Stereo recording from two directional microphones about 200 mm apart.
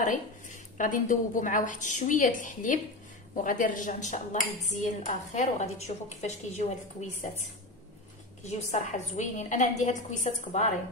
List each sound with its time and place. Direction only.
0.0 s a woman's voice: 40° left (ahead or behind)